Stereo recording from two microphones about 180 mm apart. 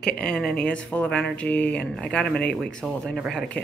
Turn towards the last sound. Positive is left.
turn(degrees=5)  # may be behind; listen again after turning